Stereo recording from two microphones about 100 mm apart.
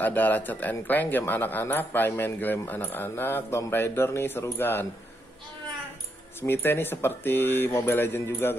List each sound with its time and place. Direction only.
0.0 s speech: 20° left (ahead or behind)
6.4 s speech: 20° left (ahead or behind)